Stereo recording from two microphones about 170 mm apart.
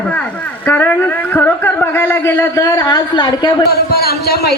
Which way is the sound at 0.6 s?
10° left (ahead or behind).